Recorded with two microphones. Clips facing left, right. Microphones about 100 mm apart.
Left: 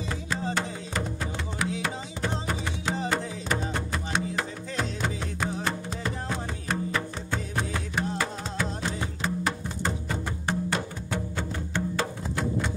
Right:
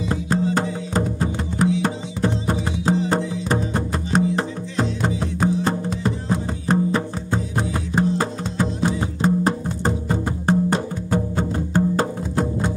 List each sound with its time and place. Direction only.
0.6 s music: 40° right (ahead or behind)